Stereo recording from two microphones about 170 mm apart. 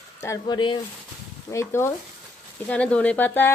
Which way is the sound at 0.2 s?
20° left (ahead or behind).